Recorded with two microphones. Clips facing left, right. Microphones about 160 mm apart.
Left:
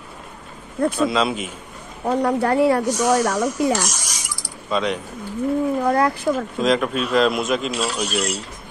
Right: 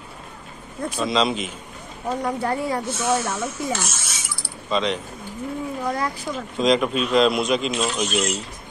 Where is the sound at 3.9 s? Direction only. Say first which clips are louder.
Left 2 dB; 10° left (ahead or behind).